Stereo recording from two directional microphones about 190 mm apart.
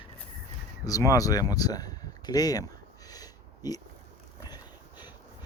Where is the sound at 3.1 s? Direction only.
20° left (ahead or behind).